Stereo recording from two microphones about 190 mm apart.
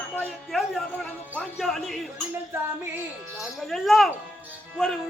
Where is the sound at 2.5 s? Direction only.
15° right (ahead or behind).